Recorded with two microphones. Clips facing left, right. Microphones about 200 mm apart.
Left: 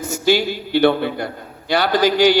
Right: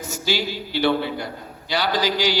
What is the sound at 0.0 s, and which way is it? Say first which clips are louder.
A man's voice: left 8 dB; 55° left (ahead or behind).